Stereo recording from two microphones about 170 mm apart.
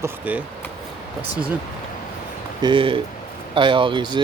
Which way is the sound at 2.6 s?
30° right (ahead or behind).